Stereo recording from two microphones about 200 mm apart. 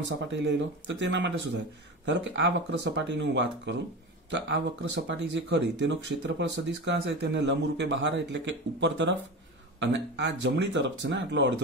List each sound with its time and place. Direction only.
0.0 s speech: 60° right (ahead or behind)